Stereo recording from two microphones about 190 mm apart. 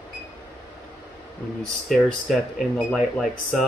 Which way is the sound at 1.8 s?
Centre (ahead or behind).